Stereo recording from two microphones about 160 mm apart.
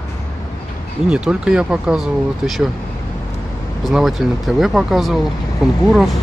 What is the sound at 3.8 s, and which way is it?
Speech, centre (ahead or behind).